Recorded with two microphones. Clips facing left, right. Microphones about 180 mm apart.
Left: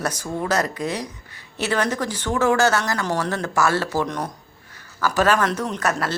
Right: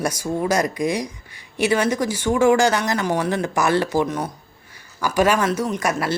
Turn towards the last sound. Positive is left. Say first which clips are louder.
# right 2 dB
turn(degrees=-10)  # may be behind; listen again after turning